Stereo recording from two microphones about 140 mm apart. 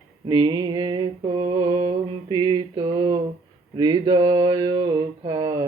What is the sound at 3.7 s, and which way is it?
Mantra, 30° right (ahead or behind).